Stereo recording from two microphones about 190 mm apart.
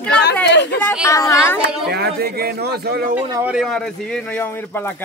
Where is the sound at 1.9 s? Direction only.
55° right (ahead or behind).